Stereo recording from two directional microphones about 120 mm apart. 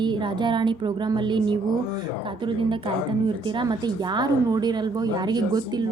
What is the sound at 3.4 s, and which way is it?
A woman's voice, 40° right (ahead or behind).